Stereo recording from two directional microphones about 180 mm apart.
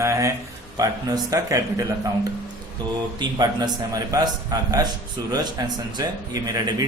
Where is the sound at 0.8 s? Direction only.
20° right (ahead or behind).